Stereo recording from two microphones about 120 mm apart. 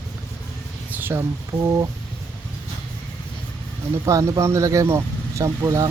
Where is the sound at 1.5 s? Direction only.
50° right (ahead or behind).